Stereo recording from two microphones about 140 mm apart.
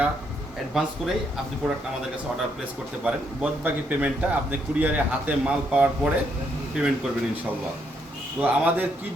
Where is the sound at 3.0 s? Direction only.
10° right (ahead or behind).